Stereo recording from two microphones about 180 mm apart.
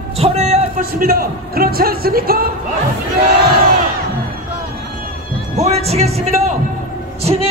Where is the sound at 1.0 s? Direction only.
55° right (ahead or behind).